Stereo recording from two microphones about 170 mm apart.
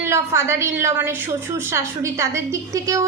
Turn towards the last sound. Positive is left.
turn(degrees=-20)  # may be behind; listen again after turning